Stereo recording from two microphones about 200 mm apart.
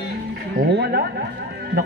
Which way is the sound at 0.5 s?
55° right (ahead or behind).